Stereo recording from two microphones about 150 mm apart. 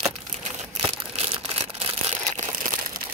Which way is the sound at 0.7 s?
45° right (ahead or behind).